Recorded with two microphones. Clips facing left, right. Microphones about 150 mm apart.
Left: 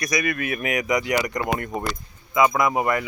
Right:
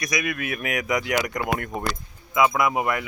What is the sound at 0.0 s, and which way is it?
Speech, centre (ahead or behind).